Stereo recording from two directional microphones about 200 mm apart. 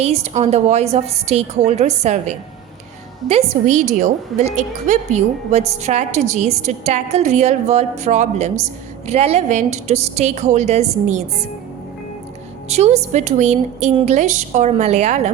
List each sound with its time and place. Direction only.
0.0 s a woman's voice: 35° right (ahead or behind)
12.6 s a woman's voice: 35° right (ahead or behind)